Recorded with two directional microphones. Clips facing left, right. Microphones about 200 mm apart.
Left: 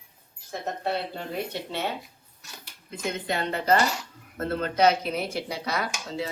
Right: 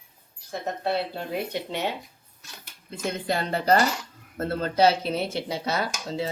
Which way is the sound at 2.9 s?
35° right (ahead or behind).